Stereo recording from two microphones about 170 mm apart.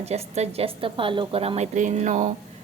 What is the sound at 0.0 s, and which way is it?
A woman's voice, 40° right (ahead or behind).